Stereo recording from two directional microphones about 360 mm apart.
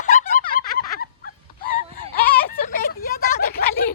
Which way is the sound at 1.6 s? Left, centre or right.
Left.